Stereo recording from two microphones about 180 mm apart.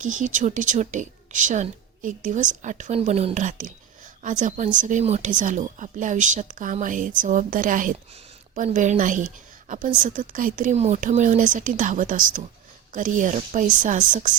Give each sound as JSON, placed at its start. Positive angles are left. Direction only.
{"t": 0.0, "sound": "a woman's voice", "side_deg": -45}